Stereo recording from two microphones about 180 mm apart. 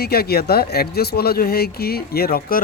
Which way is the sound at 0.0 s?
60° left (ahead or behind).